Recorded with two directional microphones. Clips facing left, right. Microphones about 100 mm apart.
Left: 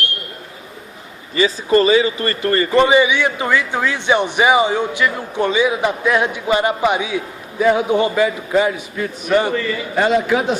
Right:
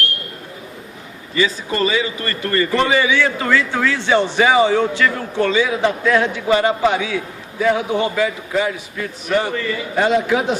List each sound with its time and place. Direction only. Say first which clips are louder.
1.4 s a man's voice: left 4 dB; 30° left (ahead or behind)
2.7 s a man's voice: left 4 dB; 20° left (ahead or behind)
10.0 s a man's voice: left 1 dB; 45° left (ahead or behind)